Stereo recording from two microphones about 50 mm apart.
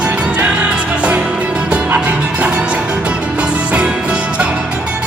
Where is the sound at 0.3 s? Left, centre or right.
Right.